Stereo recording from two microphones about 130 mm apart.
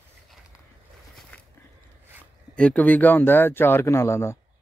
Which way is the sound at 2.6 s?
10° left (ahead or behind).